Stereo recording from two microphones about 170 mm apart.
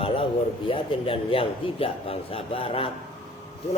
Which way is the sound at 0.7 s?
30° left (ahead or behind).